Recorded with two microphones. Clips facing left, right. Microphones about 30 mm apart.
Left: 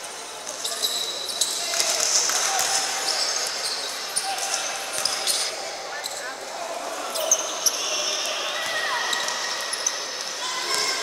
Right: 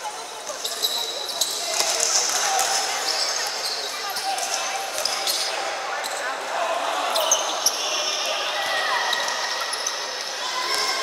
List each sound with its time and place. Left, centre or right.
1.8 s basketball bounce: centre
7.0 s basketball bounce: right
7.9 s basketball bounce: centre
10.5 s a sound: centre